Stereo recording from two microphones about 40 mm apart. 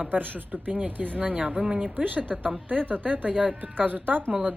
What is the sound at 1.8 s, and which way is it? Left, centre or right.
A woman's voice, right.